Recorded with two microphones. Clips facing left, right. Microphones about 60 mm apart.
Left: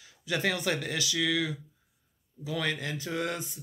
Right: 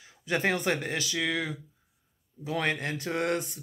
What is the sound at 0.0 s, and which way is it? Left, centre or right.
Speech, right.